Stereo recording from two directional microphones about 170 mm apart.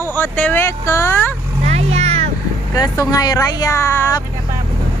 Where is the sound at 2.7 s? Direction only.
20° left (ahead or behind).